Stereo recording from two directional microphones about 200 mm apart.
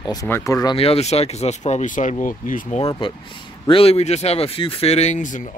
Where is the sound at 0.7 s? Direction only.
30° left (ahead or behind).